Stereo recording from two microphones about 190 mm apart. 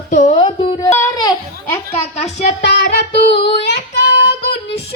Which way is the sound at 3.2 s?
30° left (ahead or behind).